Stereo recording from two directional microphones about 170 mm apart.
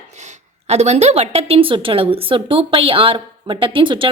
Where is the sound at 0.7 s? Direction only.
40° right (ahead or behind).